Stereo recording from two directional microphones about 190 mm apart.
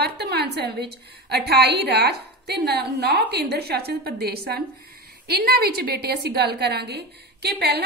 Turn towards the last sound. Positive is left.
turn(degrees=-60)  # may be behind; listen again after turning